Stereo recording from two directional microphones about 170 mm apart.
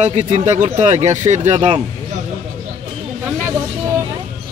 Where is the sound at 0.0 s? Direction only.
40° right (ahead or behind).